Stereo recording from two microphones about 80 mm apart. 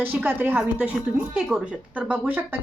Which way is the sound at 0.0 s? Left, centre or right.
Right.